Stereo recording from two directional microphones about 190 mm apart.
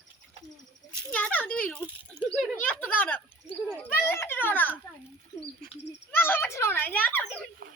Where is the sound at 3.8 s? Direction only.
10° left (ahead or behind).